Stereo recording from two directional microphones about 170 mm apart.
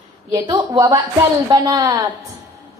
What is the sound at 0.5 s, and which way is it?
A woman's voice, 20° right (ahead or behind).